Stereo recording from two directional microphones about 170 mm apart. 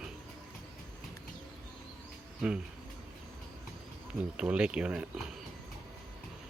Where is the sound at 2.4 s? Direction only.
5° right (ahead or behind).